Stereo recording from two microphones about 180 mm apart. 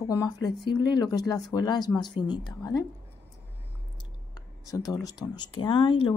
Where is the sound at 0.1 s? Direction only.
20° left (ahead or behind).